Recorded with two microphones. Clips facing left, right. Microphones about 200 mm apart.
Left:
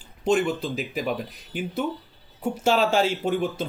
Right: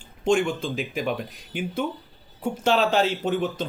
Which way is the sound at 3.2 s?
10° left (ahead or behind).